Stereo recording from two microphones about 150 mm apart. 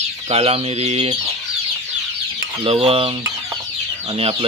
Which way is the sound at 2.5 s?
40° right (ahead or behind).